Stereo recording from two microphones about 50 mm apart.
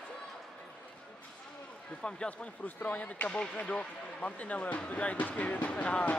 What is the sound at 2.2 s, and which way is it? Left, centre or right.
Speech, left.